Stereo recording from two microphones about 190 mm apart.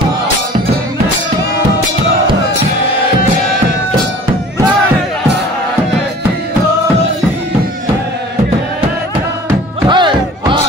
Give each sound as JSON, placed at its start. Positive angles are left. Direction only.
{"t": 9.8, "sound": "music", "side_deg": -25}